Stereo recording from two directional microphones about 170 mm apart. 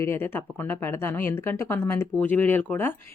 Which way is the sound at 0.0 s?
15° left (ahead or behind).